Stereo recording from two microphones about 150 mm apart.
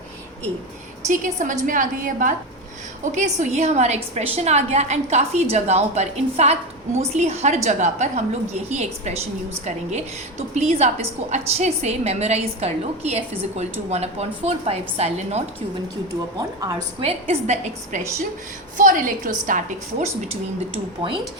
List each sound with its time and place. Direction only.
1.0 s a woman's voice: 55° right (ahead or behind)
17.0 s a woman's voice: 40° right (ahead or behind)
18.8 s a woman's voice: 60° right (ahead or behind)
20.7 s speech: 35° right (ahead or behind)